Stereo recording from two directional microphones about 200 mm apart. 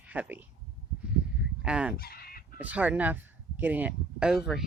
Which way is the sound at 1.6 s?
5° right (ahead or behind).